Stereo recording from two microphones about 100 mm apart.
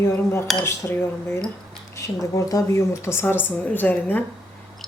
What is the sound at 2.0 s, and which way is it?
Speech, 35° left (ahead or behind).